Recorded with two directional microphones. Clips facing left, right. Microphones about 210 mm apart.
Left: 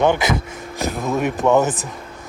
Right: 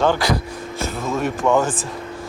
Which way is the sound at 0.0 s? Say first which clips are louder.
Left 1 dB; 20° left (ahead or behind).